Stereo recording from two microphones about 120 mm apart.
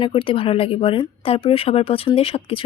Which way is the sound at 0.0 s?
45° left (ahead or behind).